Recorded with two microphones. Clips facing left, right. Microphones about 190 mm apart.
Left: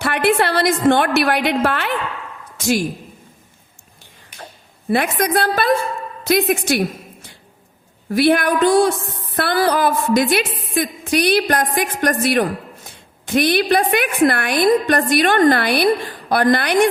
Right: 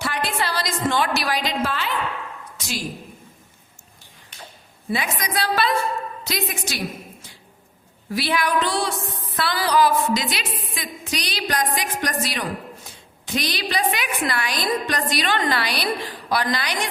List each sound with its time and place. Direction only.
0.0 s a woman's voice: 60° left (ahead or behind)
4.9 s a woman's voice: 60° left (ahead or behind)